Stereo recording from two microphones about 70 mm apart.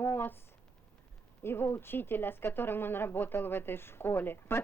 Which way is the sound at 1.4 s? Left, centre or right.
Left.